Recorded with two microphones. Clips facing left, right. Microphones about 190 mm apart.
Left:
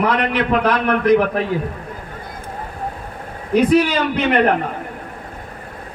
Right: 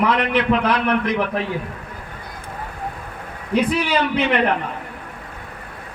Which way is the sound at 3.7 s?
45° left (ahead or behind).